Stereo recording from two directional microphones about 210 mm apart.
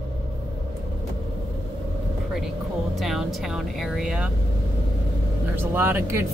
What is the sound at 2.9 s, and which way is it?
A woman's voice, centre (ahead or behind).